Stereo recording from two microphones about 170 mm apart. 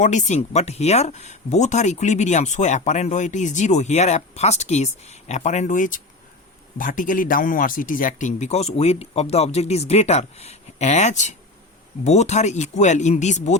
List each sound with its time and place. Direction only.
0.0 s speech: 45° left (ahead or behind)